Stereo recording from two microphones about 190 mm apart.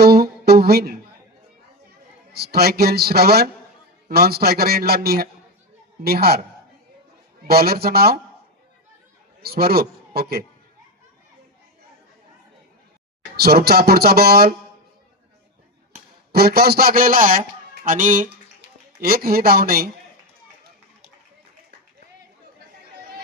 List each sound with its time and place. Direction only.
0.0 s a sound: 55° right (ahead or behind)
2.3 s speech: 55° right (ahead or behind)
7.4 s a man's voice: 55° right (ahead or behind)
9.4 s a man's voice: 55° right (ahead or behind)
13.3 s speech: 55° right (ahead or behind)
16.3 s a man's voice: 55° right (ahead or behind)